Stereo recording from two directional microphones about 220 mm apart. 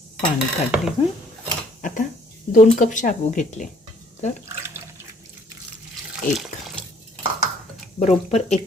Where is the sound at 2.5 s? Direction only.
35° left (ahead or behind).